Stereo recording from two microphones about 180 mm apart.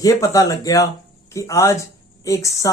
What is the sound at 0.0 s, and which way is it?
Speech, 20° left (ahead or behind).